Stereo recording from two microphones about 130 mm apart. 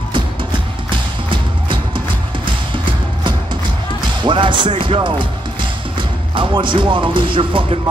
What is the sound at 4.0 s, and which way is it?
Speech, 40° right (ahead or behind).